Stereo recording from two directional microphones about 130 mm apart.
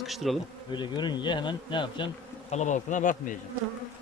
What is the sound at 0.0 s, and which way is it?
Bee, centre (ahead or behind).